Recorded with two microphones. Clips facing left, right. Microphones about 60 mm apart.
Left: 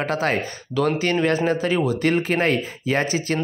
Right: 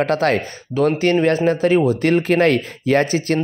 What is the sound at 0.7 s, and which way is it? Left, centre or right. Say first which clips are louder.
Speech: right 4 dB; right.